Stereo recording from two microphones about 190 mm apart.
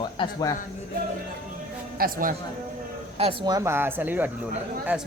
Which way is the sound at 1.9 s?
50° right (ahead or behind).